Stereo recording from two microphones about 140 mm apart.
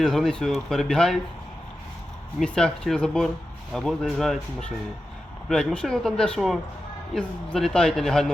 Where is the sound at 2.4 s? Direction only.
5° left (ahead or behind).